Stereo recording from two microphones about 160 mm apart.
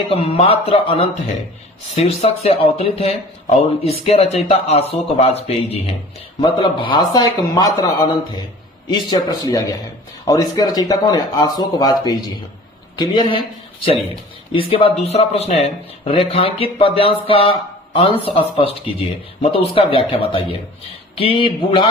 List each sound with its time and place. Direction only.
0.1 s speech: 40° left (ahead or behind)
2.0 s speech: 40° left (ahead or behind)
14.5 s speech: 35° left (ahead or behind)